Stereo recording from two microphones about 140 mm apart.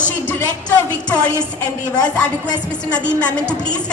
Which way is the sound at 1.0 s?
10° left (ahead or behind).